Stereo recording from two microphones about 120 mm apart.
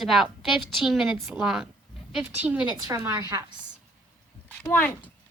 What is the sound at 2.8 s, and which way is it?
Speech, 25° right (ahead or behind).